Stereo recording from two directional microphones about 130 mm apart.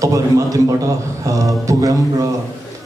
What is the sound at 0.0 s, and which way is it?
Speech, 25° right (ahead or behind).